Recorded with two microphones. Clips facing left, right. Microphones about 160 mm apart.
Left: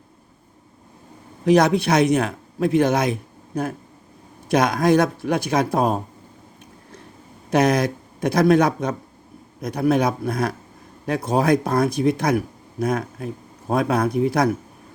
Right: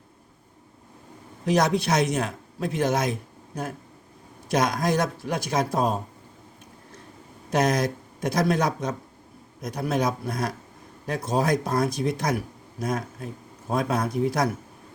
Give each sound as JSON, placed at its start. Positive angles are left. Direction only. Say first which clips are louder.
{"t": 1.5, "sound": "a man's voice", "louder": "left 6 dB", "side_deg": 60}
{"t": 7.5, "sound": "speech", "louder": "left 5 dB", "side_deg": 65}